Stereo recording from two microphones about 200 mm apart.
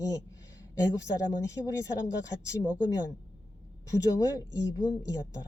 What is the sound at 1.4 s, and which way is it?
Speech, 15° left (ahead or behind).